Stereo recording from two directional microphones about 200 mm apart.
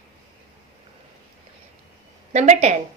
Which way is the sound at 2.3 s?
35° right (ahead or behind).